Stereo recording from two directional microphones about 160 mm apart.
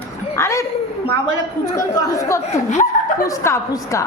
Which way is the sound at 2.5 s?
45° left (ahead or behind).